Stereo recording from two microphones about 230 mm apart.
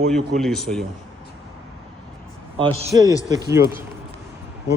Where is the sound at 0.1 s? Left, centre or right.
Centre.